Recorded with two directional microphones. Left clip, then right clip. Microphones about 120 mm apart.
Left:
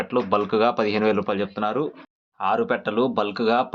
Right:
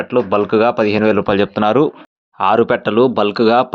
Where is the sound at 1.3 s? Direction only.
90° right.